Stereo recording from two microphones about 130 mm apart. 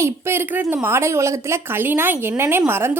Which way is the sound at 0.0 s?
20° right (ahead or behind).